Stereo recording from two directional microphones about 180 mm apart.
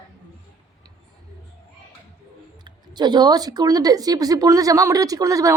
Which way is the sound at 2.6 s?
25° right (ahead or behind).